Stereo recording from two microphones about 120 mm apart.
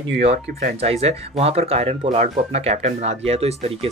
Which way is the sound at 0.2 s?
55° right (ahead or behind).